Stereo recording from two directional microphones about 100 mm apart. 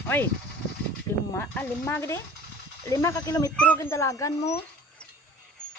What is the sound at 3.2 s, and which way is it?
Speech, 35° left (ahead or behind).